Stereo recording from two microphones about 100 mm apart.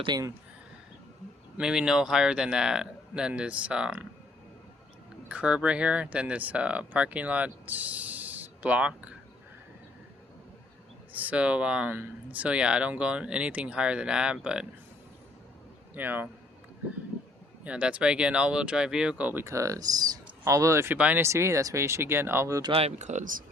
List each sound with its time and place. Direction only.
0.1 s speech: 45° right (ahead or behind)
1.5 s speech: 5° right (ahead or behind)
5.3 s speech: 10° right (ahead or behind)
11.1 s speech: 15° right (ahead or behind)
16.0 s speech: 20° right (ahead or behind)
17.6 s speech: 10° right (ahead or behind)
19.5 s speech: 35° right (ahead or behind)
20.9 s speech: 15° right (ahead or behind)
21.2 s speech: 30° right (ahead or behind)